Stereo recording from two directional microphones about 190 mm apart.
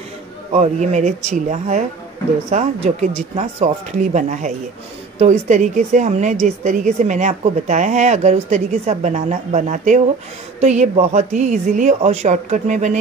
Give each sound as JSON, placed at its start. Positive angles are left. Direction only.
{"t": 0.5, "sound": "a woman's voice", "side_deg": -35}